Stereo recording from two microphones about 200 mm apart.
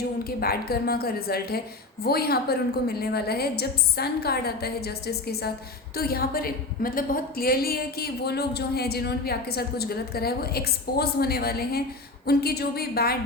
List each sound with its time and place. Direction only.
0.3 s a woman's voice: 50° left (ahead or behind)